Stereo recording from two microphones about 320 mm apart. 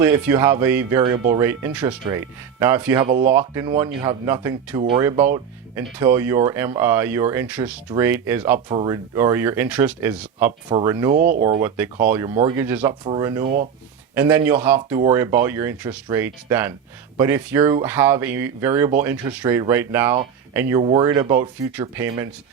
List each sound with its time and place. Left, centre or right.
0.0 s speech: centre
11.1 s speech: right
11.4 s speech: centre